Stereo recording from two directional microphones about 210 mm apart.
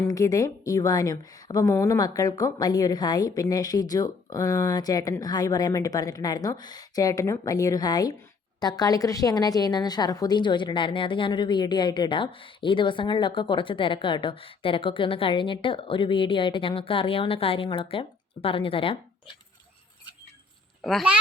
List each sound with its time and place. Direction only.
0.0 s a woman's voice: 15° left (ahead or behind)
20.8 s speech: centre (ahead or behind)